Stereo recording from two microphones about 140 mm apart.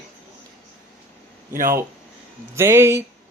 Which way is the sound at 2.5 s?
20° right (ahead or behind).